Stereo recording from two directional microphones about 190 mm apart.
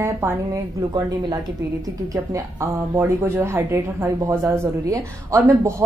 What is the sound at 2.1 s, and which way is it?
A woman's voice, 15° right (ahead or behind).